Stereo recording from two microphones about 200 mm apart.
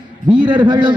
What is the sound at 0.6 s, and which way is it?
Speech, 25° right (ahead or behind).